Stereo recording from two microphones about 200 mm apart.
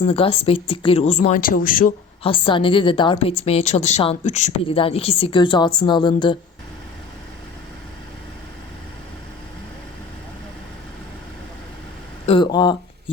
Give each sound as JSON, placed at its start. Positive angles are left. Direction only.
{"t": 0.1, "sound": "a woman's voice", "side_deg": 30}
{"t": 2.2, "sound": "a woman's voice", "side_deg": 25}
{"t": 12.2, "sound": "a woman's voice", "side_deg": 25}